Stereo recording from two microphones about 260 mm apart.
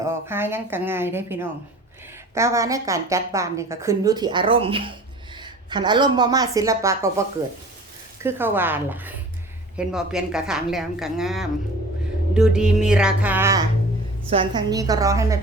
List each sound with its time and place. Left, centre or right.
0.0 s a woman's voice: centre
8.2 s a woman's voice: centre